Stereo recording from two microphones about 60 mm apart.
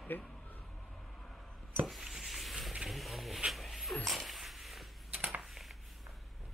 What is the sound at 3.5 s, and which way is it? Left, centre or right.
Dog, centre.